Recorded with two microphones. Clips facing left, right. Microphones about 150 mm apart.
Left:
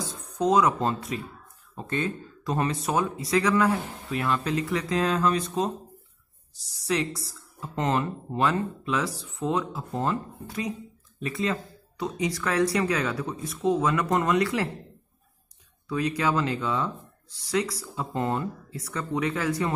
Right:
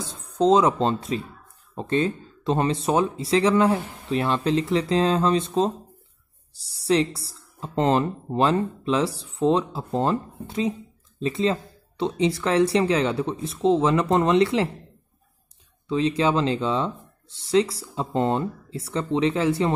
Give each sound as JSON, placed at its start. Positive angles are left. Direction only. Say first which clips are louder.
{"t": 0.1, "sound": "speech", "louder": "right 5 dB", "side_deg": -25}
{"t": 15.9, "sound": "speech", "louder": "right 4 dB", "side_deg": -25}